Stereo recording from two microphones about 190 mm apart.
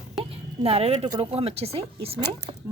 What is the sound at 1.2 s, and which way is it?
Speech, 30° right (ahead or behind).